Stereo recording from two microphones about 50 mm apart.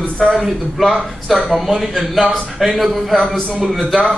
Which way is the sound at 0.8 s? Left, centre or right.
Centre.